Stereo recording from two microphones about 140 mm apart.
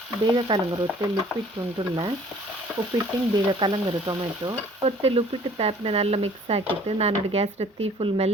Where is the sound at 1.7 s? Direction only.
35° right (ahead or behind).